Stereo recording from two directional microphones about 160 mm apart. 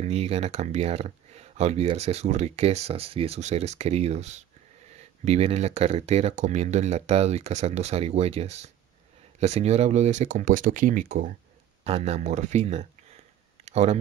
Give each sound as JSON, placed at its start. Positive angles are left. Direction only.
{"t": 0.0, "sound": "speech", "side_deg": -40}
{"t": 11.8, "sound": "speech", "side_deg": -40}
{"t": 13.7, "sound": "a sound", "side_deg": -45}